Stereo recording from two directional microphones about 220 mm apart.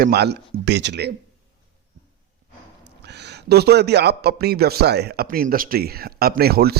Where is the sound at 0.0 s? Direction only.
50° right (ahead or behind).